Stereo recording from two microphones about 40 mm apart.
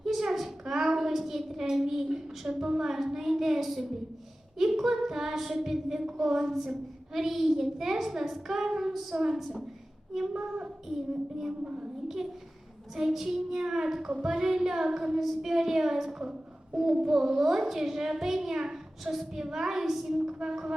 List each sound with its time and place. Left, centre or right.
0.0 s a sound: centre
2.6 s a woman's voice: centre
11.6 s a woman's voice: right
12.0 s a woman's voice: centre
14.1 s a woman's voice: right
14.5 s a woman's voice: centre
20.1 s a woman's voice: centre